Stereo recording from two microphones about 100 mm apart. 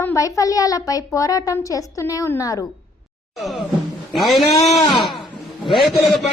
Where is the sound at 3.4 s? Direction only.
Centre (ahead or behind).